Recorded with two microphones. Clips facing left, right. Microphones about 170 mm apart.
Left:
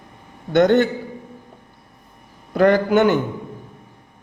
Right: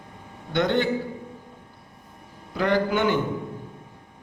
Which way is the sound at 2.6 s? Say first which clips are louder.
Left 7 dB; 50° left (ahead or behind).